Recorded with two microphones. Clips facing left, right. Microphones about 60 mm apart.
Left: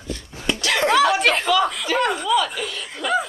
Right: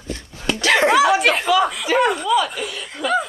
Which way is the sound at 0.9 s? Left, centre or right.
Centre.